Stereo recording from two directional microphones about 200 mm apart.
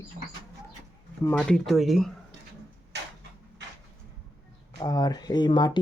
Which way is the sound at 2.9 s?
60° right (ahead or behind).